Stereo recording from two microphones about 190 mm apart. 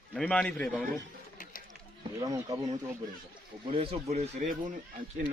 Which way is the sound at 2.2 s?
20° right (ahead or behind).